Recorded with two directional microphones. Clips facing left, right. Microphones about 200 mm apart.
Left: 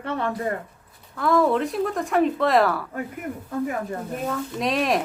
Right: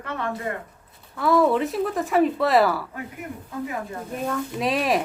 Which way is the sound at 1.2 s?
5° right (ahead or behind).